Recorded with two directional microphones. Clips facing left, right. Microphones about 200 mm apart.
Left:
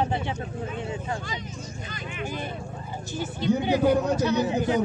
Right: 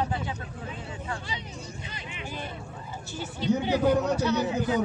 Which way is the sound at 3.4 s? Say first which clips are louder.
Left 2 dB; 15° left (ahead or behind).